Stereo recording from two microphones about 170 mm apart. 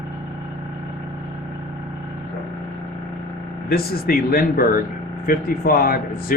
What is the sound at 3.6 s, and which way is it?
Speech, 60° left (ahead or behind).